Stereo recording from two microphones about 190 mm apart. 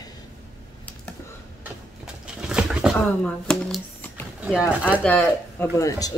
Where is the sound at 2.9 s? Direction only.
5° left (ahead or behind).